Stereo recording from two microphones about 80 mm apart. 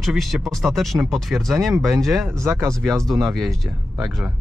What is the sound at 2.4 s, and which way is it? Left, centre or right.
Speech, right.